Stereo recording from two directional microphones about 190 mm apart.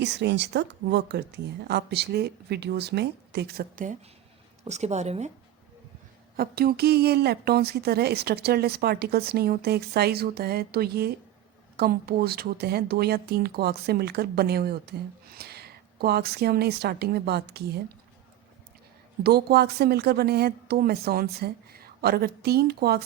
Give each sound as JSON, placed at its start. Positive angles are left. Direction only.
{"t": 0.0, "sound": "a woman's voice", "side_deg": -65}
{"t": 4.6, "sound": "a woman's voice", "side_deg": -35}
{"t": 6.3, "sound": "a woman's voice", "side_deg": -55}
{"t": 19.2, "sound": "a woman's voice", "side_deg": -55}